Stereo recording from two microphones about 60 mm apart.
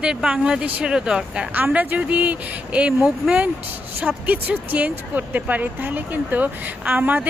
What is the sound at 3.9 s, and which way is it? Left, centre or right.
A woman's voice, right.